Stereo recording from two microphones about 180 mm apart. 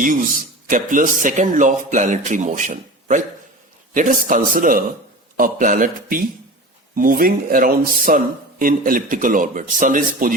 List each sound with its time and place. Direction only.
0.0 s speech: 45° right (ahead or behind)